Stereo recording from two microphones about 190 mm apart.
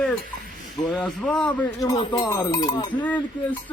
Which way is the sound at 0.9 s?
5° left (ahead or behind).